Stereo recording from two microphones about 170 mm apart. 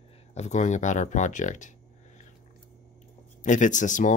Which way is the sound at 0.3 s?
40° left (ahead or behind).